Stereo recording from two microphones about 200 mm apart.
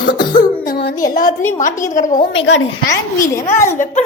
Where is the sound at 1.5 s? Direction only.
40° left (ahead or behind).